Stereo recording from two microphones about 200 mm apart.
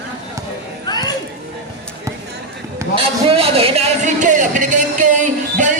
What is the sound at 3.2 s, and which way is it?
Music, 30° right (ahead or behind).